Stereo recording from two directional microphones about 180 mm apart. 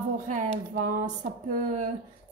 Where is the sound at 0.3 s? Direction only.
45° right (ahead or behind).